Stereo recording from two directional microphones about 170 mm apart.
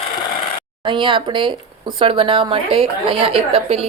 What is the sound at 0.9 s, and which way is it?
A woman's voice, 30° right (ahead or behind).